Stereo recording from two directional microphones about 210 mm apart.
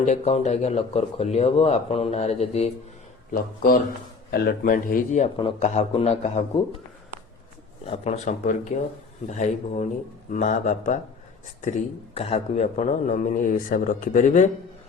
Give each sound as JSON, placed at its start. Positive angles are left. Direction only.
{"t": 0.0, "sound": "speech", "side_deg": 35}
{"t": 4.3, "sound": "a man's voice", "side_deg": 50}
{"t": 7.9, "sound": "speech", "side_deg": 30}
{"t": 12.1, "sound": "speech", "side_deg": 30}